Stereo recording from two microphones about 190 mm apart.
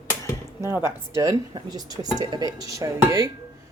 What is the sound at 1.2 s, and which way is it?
Speech, 20° right (ahead or behind).